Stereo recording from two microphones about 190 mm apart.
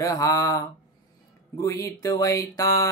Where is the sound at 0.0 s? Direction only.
15° left (ahead or behind).